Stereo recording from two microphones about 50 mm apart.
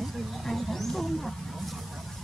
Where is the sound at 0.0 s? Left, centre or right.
Centre.